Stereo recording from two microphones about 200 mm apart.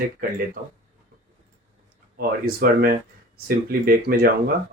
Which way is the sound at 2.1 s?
50° right (ahead or behind).